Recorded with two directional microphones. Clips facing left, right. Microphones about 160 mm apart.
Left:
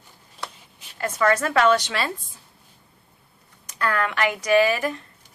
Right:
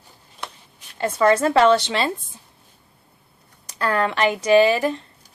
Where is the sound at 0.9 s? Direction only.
30° right (ahead or behind).